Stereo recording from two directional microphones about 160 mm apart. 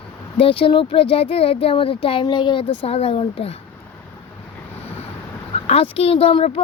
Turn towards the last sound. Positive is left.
turn(degrees=40)  # may be behind; listen again after turning